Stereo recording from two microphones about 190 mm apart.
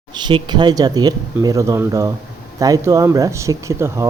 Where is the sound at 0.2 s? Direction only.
25° right (ahead or behind).